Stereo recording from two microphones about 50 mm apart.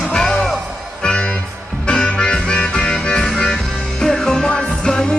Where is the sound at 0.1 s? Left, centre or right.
Centre.